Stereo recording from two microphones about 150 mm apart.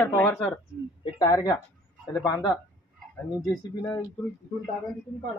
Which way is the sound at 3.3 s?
20° left (ahead or behind).